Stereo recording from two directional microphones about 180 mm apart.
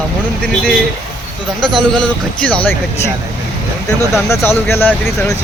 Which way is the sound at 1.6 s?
5° left (ahead or behind).